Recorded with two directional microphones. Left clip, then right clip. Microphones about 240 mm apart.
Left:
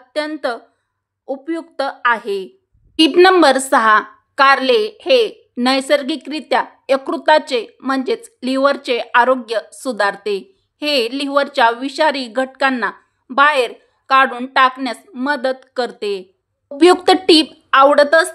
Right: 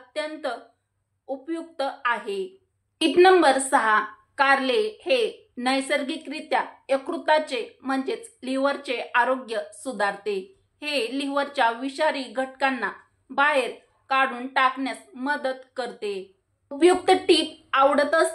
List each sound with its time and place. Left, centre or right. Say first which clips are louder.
0.1 s a woman's voice: left 9 dB; left